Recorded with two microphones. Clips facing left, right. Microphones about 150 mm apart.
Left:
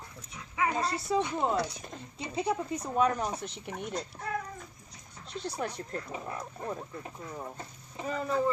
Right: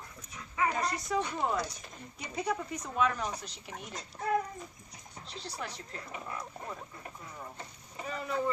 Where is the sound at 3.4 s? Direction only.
55° left (ahead or behind).